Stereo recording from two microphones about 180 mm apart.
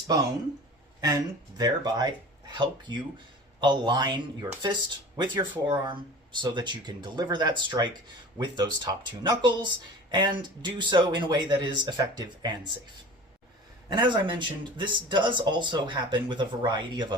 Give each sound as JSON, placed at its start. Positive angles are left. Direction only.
{"t": 1.0, "sound": "speech", "side_deg": -20}
{"t": 13.8, "sound": "speech", "side_deg": -25}